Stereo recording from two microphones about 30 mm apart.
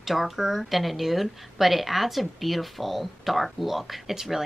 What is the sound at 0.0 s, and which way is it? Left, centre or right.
Speech, centre.